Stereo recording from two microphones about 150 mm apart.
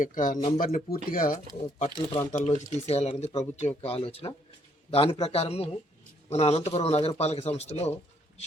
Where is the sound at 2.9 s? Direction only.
45° left (ahead or behind).